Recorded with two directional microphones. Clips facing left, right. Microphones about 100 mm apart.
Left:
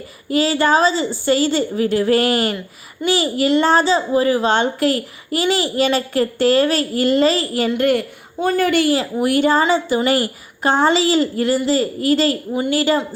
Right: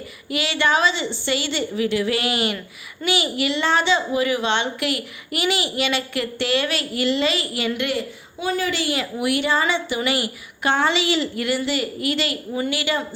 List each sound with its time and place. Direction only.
0.3 s a child's voice: 35° left (ahead or behind)
8.9 s a child's voice: 35° left (ahead or behind)